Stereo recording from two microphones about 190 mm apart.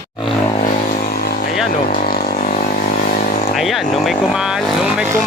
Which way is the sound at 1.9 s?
50° left (ahead or behind).